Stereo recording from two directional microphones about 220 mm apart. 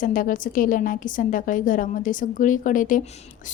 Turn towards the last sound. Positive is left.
turn(degrees=35)  # may be behind; listen again after turning